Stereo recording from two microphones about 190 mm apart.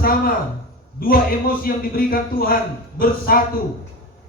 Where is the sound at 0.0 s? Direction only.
50° left (ahead or behind).